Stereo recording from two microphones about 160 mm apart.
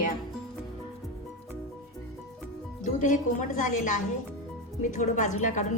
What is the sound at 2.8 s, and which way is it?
A woman's voice, 55° left (ahead or behind).